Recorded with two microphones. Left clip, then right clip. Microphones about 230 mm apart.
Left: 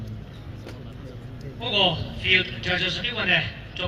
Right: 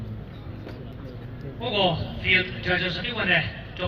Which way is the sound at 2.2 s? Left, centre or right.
Left.